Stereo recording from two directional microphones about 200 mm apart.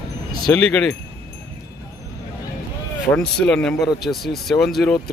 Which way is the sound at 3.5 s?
5° left (ahead or behind).